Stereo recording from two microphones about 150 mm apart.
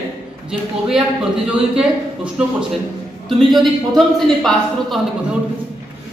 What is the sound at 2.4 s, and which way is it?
A man's voice, 5° right (ahead or behind).